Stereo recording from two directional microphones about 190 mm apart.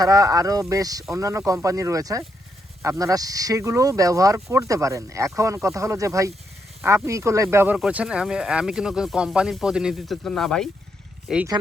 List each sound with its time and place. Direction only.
0.0 s speech: 20° right (ahead or behind); by 11.4 s centre (ahead or behind)